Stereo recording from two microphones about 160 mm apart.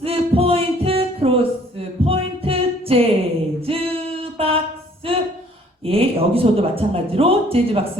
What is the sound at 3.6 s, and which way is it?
Singing, 35° right (ahead or behind).